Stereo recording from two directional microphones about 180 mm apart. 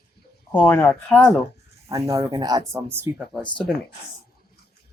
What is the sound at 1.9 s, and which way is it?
Speech, 20° right (ahead or behind).